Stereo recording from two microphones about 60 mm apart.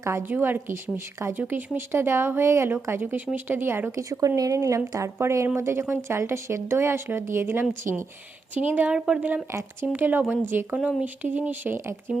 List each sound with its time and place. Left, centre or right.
0.0 s speech: right
0.3 s speech: right
1.4 s speech: right
3.9 s a woman's voice: right
8.5 s speech: right
8.9 s a woman's voice: centre
9.8 s speech: right
10.8 s speech: right
11.7 s speech: right